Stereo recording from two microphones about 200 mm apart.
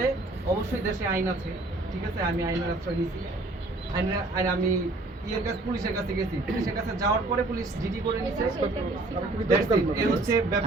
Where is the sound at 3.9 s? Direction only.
15° right (ahead or behind).